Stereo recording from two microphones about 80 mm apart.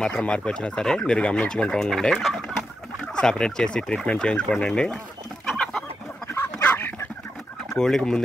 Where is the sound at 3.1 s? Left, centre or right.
Centre.